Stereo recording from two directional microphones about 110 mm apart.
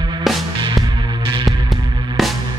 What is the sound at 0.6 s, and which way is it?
Music, 40° right (ahead or behind).